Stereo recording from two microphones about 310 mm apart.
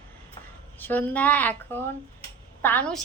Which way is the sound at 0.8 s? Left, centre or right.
Centre.